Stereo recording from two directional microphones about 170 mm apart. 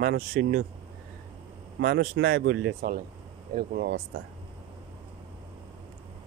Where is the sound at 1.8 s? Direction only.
65° right (ahead or behind); by 2.9 s 90° right.